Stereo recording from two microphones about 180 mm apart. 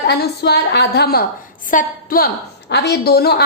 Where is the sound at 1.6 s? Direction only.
50° left (ahead or behind).